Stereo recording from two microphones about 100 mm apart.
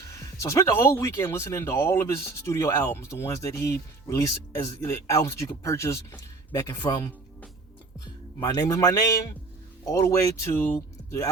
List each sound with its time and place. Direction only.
0.1 s speech: 30° left (ahead or behind)
6.5 s speech: 40° left (ahead or behind)
8.4 s a man's voice: 35° left (ahead or behind)